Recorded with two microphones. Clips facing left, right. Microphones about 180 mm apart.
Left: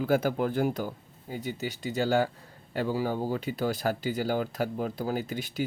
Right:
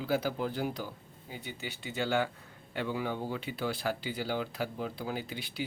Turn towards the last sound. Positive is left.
turn(degrees=45)  # may be behind; listen again after turning